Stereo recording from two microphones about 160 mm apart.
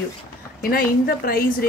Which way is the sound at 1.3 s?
65° left (ahead or behind).